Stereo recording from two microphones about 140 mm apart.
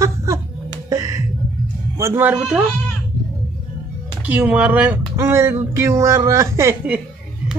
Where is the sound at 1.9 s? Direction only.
20° right (ahead or behind).